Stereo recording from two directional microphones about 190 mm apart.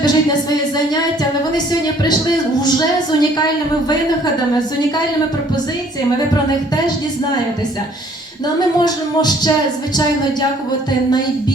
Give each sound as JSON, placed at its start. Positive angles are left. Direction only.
{"t": 2.6, "sound": "music", "side_deg": 20}
{"t": 8.8, "sound": "music", "side_deg": 20}